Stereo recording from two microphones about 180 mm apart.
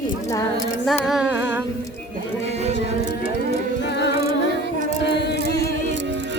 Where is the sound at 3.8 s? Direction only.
75° left (ahead or behind).